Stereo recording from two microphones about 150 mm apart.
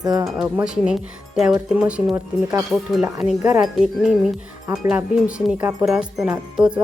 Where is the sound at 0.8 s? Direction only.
5° right (ahead or behind).